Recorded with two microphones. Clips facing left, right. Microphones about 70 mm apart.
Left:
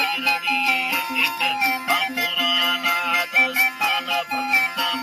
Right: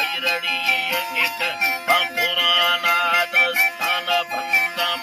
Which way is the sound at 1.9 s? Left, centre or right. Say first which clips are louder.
Right 2 dB; right.